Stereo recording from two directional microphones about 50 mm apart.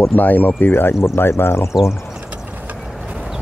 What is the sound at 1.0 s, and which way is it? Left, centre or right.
Speech, left.